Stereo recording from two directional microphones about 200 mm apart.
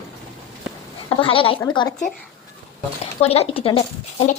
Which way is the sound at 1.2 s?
25° left (ahead or behind).